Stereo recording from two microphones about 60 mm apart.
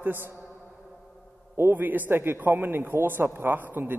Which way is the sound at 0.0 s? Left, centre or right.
Right.